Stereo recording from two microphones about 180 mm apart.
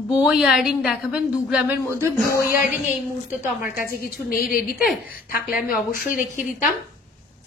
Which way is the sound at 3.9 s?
55° left (ahead or behind).